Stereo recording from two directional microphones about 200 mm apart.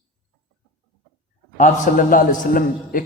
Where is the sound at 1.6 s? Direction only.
40° left (ahead or behind).